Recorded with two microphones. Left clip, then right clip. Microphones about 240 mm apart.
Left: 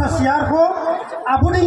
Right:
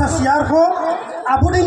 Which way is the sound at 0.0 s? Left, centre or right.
Right.